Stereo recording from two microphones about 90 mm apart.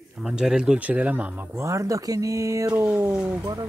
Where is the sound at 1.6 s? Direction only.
35° right (ahead or behind).